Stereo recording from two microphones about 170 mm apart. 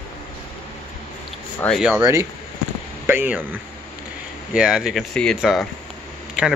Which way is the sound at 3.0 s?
10° right (ahead or behind).